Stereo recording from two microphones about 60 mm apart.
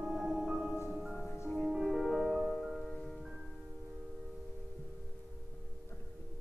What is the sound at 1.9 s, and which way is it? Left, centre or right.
Music, centre.